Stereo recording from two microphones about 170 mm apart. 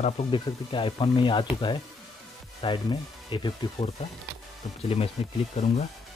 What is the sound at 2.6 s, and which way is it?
Speech, 30° left (ahead or behind).